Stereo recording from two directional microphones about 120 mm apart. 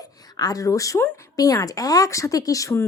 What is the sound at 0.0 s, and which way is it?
A woman's voice, 30° left (ahead or behind).